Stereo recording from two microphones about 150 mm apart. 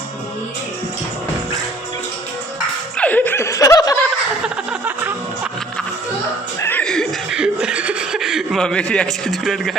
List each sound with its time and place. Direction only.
3.0 s snicker: 10° left (ahead or behind)
4.4 s music: 10° right (ahead or behind)
6.6 s chuckle: 15° left (ahead or behind)